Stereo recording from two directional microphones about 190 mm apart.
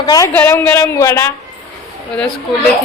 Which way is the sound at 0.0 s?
20° left (ahead or behind).